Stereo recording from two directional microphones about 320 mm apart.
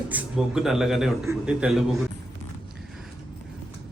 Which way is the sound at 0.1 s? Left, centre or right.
Centre.